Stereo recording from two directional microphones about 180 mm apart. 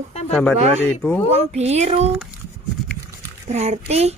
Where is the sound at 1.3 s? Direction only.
35° right (ahead or behind).